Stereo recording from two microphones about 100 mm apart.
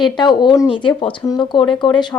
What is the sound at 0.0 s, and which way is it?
A woman's voice, 50° left (ahead or behind).